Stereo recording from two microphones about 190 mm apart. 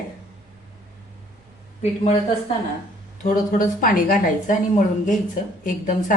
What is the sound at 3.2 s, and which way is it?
A woman's voice, 45° left (ahead or behind).